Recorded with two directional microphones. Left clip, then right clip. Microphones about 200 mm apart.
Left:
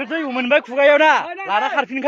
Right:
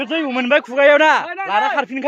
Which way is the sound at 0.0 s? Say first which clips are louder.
Right 2 dB; 20° right (ahead or behind).